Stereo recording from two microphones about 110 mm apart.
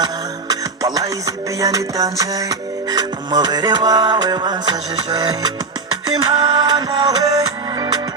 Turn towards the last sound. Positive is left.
turn(degrees=-35)  # may be behind; listen again after turning